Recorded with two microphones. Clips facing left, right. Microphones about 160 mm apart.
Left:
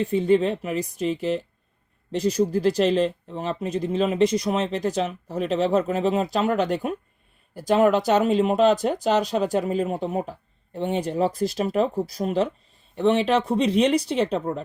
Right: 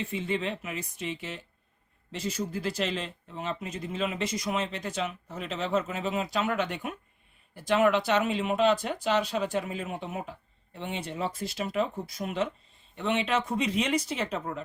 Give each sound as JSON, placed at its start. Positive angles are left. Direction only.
{"t": 0.0, "sound": "speech", "side_deg": 40}